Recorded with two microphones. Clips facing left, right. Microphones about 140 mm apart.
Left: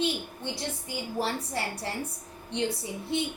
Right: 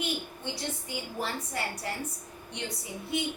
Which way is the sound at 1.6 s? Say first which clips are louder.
Even; 30° left (ahead or behind).